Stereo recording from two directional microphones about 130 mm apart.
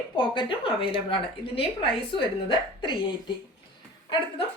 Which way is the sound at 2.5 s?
35° left (ahead or behind).